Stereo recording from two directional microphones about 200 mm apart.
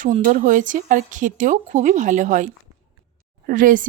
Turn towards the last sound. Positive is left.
turn(degrees=-40)  # may be behind; listen again after turning